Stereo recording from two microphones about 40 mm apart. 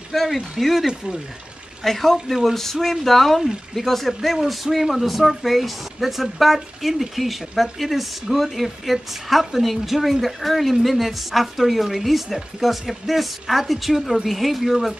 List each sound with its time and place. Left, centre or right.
0.1 s speech: centre
0.8 s speech: right
1.8 s speech: centre